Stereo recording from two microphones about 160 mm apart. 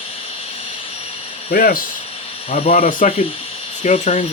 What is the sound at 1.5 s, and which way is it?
Speech, 65° left (ahead or behind).